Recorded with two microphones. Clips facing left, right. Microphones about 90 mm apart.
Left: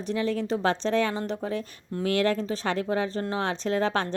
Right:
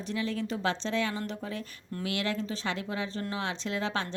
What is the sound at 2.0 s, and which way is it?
A woman's voice, 45° left (ahead or behind).